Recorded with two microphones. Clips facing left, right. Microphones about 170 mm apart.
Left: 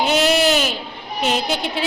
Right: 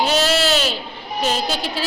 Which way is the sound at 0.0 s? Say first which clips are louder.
Left 2 dB; 20° left (ahead or behind).